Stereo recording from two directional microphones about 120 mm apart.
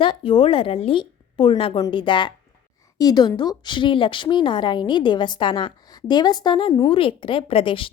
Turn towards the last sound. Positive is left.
turn(degrees=50)  # may be behind; listen again after turning